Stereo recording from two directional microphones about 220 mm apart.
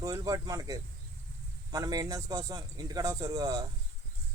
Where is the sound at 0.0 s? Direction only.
15° right (ahead or behind).